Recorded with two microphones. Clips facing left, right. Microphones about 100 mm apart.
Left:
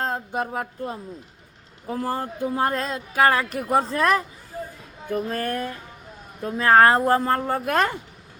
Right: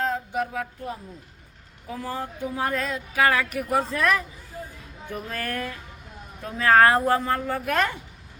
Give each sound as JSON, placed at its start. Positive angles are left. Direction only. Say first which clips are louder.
{"t": 0.0, "sound": "a sound", "louder": "even", "side_deg": 40}
{"t": 1.9, "sound": "speech", "louder": "left 5 dB", "side_deg": 45}
{"t": 5.4, "sound": "music", "louder": "left 4 dB", "side_deg": 25}
{"t": 6.4, "sound": "speech", "louder": "left 2 dB", "side_deg": 25}